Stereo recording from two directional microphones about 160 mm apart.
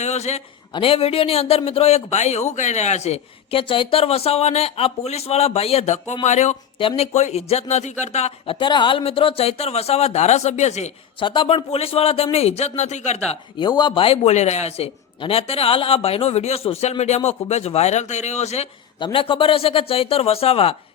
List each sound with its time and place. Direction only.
0.0 s a man's voice: 45° left (ahead or behind)
6.7 s speech: 35° left (ahead or behind)
11.3 s speech: 35° left (ahead or behind)
13.6 s speech: 30° left (ahead or behind)
18.9 s speech: 30° left (ahead or behind)